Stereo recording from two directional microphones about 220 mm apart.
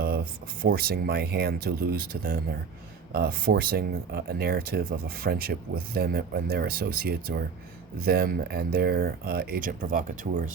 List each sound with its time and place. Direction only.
0.6 s speech: 45° right (ahead or behind)